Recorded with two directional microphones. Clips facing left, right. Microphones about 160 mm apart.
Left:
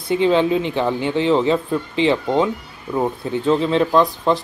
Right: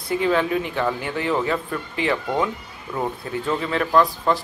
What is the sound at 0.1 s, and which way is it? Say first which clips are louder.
Speech: left 5 dB; 20° left (ahead or behind).